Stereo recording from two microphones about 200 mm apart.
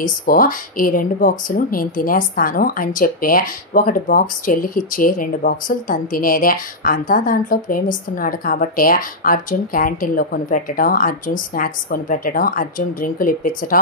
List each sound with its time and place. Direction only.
0.0 s speech: 45° left (ahead or behind)